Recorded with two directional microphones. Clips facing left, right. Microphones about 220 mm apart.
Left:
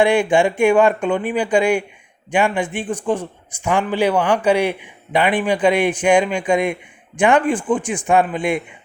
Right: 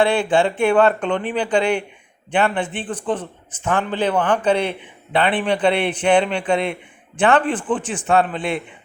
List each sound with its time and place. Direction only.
0.0 s a man's voice: 15° left (ahead or behind)